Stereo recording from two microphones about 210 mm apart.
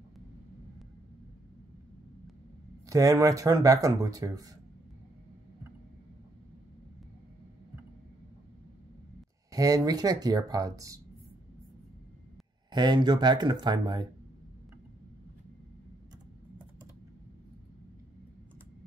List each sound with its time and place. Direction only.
2.9 s speech: 15° right (ahead or behind)
9.5 s speech: 15° right (ahead or behind)
12.7 s speech: 20° right (ahead or behind)